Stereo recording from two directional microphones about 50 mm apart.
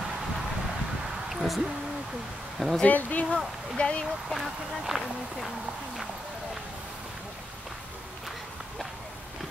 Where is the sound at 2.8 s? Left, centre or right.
Left.